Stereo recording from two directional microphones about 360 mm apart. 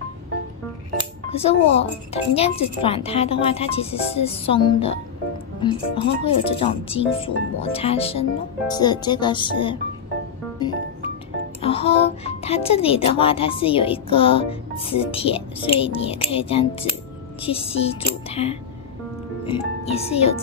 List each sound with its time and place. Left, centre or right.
1.3 s a child's voice: centre
11.6 s a child's voice: centre